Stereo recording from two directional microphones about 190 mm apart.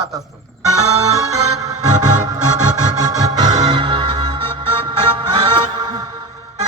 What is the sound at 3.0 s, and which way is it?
Music, 20° right (ahead or behind).